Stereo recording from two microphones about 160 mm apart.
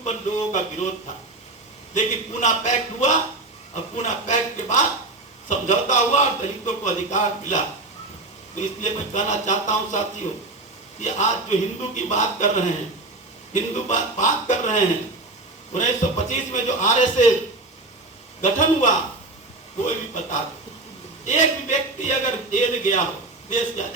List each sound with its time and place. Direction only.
0.0 s a man's voice: 45° left (ahead or behind)
1.9 s a man's voice: 50° left (ahead or behind)
11.0 s a man's voice: 50° left (ahead or behind)
18.4 s a man's voice: 50° left (ahead or behind)